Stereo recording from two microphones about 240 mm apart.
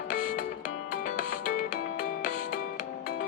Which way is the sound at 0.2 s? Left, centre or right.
Left.